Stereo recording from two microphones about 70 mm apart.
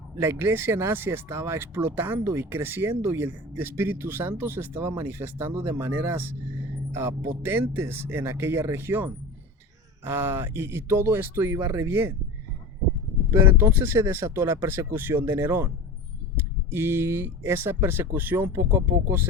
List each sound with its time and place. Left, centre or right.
0.2 s speech: right
13.4 s speech: right